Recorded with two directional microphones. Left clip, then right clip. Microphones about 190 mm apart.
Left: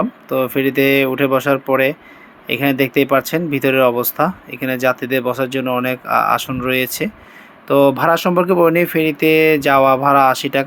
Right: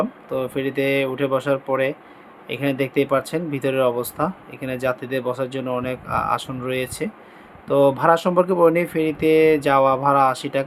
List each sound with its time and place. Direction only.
0.0 s speech: 20° left (ahead or behind)